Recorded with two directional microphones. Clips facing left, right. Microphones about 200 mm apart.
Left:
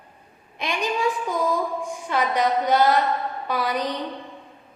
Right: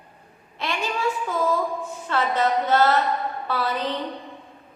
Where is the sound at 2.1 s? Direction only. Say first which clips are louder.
Even; 15° left (ahead or behind).